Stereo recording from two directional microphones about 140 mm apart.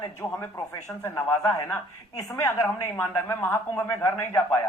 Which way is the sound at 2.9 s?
15° left (ahead or behind).